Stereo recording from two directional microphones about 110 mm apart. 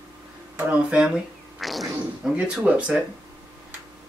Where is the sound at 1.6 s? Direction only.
Centre (ahead or behind).